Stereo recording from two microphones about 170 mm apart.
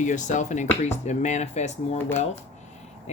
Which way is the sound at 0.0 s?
45° left (ahead or behind).